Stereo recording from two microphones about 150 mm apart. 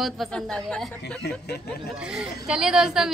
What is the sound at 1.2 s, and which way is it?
Speech, 90° left.